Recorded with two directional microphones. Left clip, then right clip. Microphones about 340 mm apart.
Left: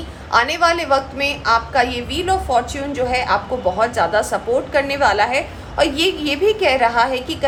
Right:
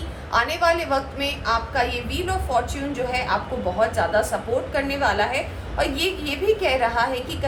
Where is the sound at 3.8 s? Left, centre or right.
Left.